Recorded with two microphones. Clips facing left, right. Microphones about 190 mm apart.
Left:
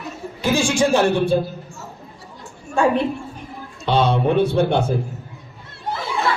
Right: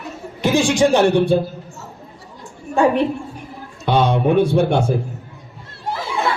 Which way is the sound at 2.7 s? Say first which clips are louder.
Right 2 dB; 15° right (ahead or behind).